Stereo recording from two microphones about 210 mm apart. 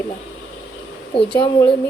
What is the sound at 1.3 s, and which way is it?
Speech, 20° left (ahead or behind).